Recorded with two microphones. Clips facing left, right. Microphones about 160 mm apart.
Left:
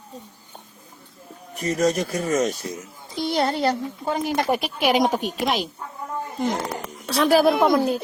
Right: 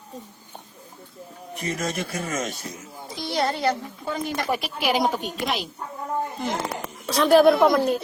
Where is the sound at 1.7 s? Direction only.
40° left (ahead or behind).